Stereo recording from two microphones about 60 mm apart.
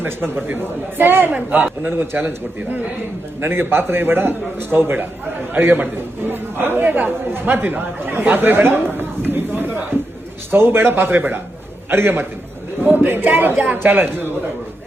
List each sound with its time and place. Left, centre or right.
0.0 s a man's voice: right